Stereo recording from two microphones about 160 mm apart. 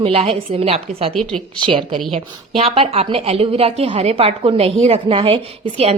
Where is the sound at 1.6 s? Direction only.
30° right (ahead or behind).